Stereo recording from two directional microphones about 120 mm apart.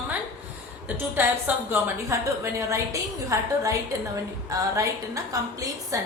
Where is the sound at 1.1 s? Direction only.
15° right (ahead or behind).